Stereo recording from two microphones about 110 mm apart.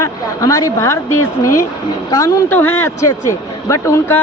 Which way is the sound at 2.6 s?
20° left (ahead or behind).